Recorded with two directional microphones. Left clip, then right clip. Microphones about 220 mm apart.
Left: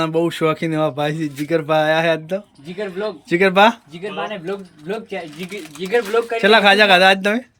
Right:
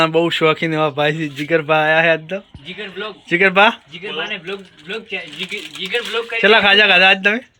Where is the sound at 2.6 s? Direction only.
45° left (ahead or behind).